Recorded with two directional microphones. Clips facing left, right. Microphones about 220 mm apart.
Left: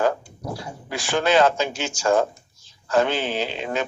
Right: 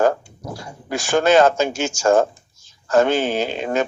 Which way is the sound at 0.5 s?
45° right (ahead or behind).